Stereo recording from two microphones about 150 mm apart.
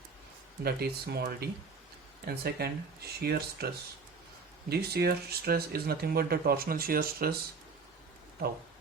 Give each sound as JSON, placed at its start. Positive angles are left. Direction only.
{"t": 0.6, "sound": "speech", "side_deg": -90}
{"t": 4.7, "sound": "speech", "side_deg": -90}